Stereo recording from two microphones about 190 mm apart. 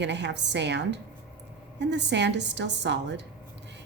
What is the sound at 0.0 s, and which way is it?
A woman's voice, 65° right (ahead or behind).